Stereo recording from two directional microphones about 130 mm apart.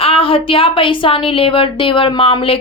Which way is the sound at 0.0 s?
45° left (ahead or behind).